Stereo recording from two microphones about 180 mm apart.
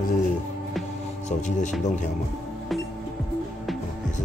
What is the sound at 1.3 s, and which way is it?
Speech, 40° left (ahead or behind).